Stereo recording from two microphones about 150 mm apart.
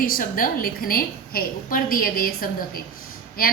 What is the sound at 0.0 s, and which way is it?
A woman's voice, 70° left (ahead or behind).